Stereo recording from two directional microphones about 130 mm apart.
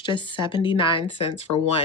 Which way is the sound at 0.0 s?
35° left (ahead or behind).